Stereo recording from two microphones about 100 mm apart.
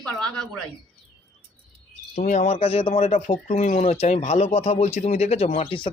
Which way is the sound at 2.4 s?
85° left.